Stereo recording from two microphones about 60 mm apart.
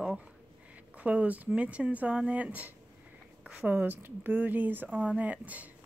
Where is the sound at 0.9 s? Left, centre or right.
Right.